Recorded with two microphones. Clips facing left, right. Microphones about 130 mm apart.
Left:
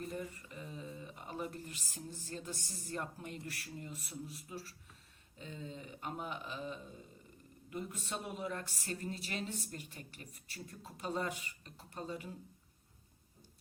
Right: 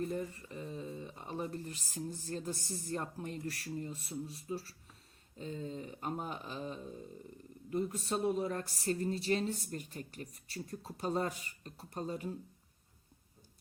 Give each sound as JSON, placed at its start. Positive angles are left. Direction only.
{"t": 0.0, "sound": "speech", "side_deg": -30}